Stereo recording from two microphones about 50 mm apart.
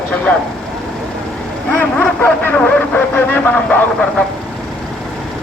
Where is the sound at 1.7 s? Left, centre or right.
Left.